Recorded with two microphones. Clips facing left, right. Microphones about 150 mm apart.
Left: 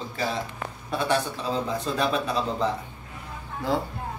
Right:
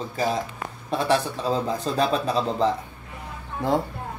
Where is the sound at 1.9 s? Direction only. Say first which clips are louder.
Right 3 dB; 35° right (ahead or behind).